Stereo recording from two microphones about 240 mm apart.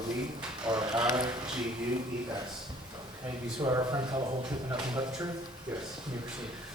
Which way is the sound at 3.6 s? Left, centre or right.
Centre.